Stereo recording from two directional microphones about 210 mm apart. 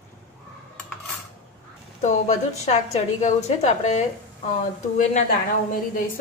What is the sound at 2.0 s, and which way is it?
A woman's voice, 30° left (ahead or behind).